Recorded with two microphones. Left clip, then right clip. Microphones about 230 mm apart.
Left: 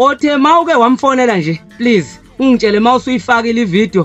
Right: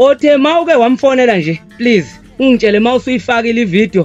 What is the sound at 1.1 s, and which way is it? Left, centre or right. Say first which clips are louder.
Speech: right 2 dB; left.